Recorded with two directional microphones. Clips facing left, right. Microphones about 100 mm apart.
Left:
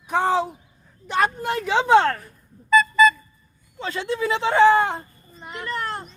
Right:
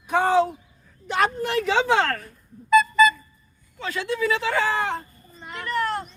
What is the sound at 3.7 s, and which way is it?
A man's voice, 25° left (ahead or behind).